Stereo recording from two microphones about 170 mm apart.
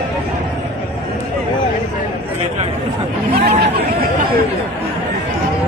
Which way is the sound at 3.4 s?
65° right (ahead or behind).